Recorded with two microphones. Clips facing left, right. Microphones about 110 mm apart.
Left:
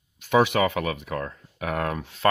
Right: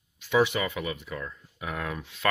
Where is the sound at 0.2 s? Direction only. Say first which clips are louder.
Left 4 dB; 60° left (ahead or behind).